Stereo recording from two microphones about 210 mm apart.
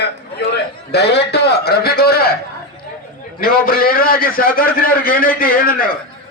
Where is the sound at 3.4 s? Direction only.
45° left (ahead or behind).